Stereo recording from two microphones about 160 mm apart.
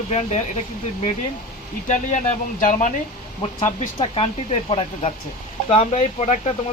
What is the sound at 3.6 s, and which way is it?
Speech, 35° left (ahead or behind).